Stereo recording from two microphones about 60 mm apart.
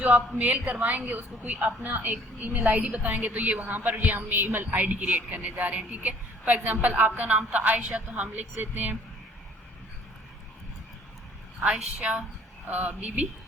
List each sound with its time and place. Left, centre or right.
0.3 s a man's voice: right
11.6 s a man's voice: centre